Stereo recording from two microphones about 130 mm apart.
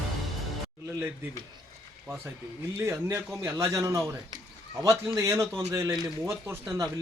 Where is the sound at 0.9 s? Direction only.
20° right (ahead or behind).